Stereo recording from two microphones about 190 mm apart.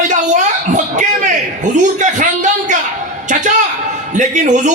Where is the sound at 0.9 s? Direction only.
40° right (ahead or behind).